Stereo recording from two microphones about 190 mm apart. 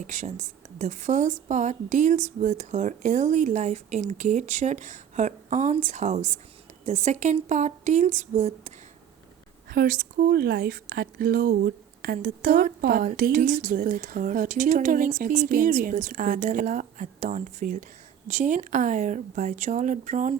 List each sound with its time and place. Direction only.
0.1 s a woman's voice: 40° right (ahead or behind)
9.6 s a woman's voice: 50° right (ahead or behind)